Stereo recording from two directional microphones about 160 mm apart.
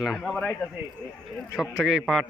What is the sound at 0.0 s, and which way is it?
Speech, centre (ahead or behind).